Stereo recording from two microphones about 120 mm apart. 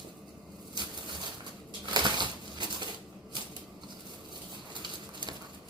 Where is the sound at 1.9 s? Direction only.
40° right (ahead or behind).